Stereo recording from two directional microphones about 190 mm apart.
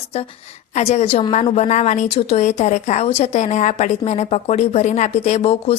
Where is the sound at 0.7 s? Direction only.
35° left (ahead or behind).